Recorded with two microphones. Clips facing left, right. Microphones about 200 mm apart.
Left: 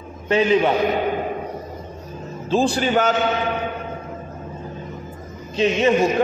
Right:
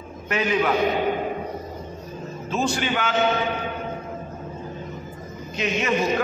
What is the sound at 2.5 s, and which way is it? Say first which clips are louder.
Speech: left 6 dB; 35° left (ahead or behind).